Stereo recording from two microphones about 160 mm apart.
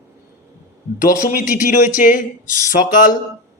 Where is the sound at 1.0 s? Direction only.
60° left (ahead or behind).